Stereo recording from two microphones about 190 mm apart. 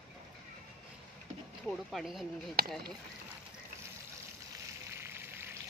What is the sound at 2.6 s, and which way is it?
Speech, 55° right (ahead or behind).